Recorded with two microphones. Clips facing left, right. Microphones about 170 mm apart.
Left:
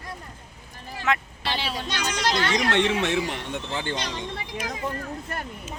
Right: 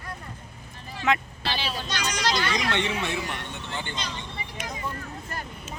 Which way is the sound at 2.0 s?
30° left (ahead or behind).